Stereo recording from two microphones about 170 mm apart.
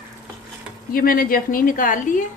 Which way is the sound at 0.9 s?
60° left (ahead or behind).